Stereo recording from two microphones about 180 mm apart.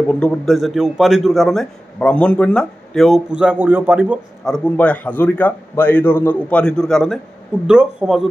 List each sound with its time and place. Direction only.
0.1 s a man's voice: 5° left (ahead or behind)
4.5 s a man's voice: 5° left (ahead or behind)